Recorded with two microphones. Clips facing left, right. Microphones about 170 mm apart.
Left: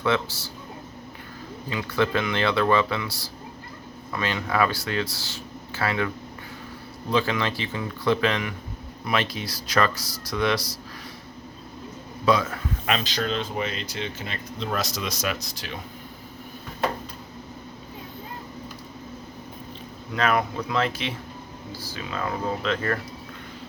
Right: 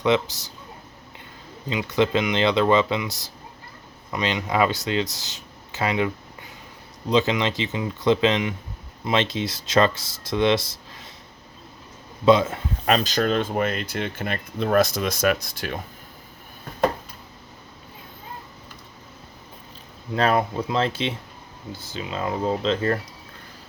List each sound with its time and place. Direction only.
0.0 s speech: 20° right (ahead or behind)
1.7 s speech: 20° right (ahead or behind)
7.1 s speech: 20° right (ahead or behind)
12.2 s speech: 25° right (ahead or behind)
12.8 s speech: 40° right (ahead or behind)
20.1 s speech: 30° right (ahead or behind)